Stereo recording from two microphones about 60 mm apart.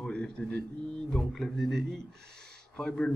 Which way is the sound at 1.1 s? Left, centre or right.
Centre.